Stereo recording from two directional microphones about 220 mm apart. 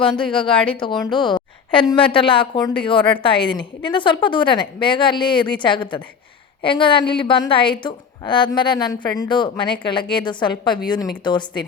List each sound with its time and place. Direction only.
0.3 s a woman's voice: 25° left (ahead or behind)